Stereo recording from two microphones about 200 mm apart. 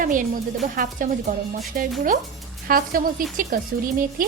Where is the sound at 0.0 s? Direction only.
40° right (ahead or behind).